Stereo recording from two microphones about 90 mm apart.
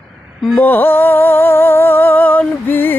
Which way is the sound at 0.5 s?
20° left (ahead or behind).